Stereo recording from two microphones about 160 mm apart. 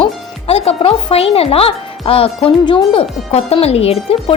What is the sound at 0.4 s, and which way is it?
Speech, 40° left (ahead or behind).